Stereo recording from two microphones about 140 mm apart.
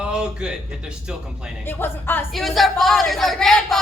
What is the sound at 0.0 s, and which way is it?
Speech, 5° right (ahead or behind).